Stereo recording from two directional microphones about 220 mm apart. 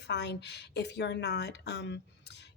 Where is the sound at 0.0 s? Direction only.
50° left (ahead or behind).